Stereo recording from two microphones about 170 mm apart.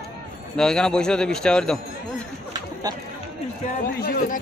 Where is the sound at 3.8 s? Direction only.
65° left (ahead or behind).